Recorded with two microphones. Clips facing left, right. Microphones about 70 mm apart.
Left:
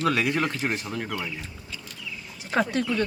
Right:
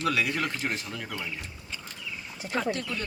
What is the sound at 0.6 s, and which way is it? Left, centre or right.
Speech, left.